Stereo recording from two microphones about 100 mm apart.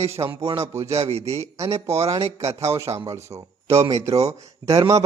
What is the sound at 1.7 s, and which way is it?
Speech, 90° right.